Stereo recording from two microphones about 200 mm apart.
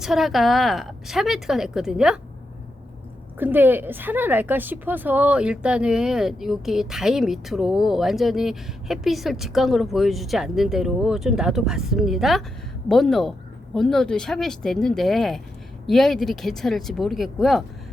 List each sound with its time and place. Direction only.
0.0 s a woman's voice: centre (ahead or behind)
3.3 s a woman's voice: 10° right (ahead or behind)